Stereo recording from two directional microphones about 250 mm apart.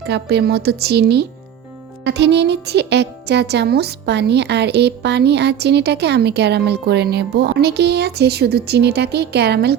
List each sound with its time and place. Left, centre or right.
0.0 s a woman's voice: right